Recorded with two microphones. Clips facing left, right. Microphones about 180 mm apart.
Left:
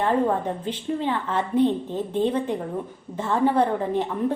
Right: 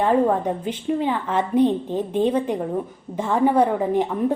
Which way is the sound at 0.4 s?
15° right (ahead or behind).